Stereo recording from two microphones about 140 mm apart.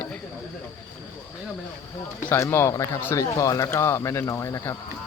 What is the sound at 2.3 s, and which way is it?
Speech, 15° left (ahead or behind).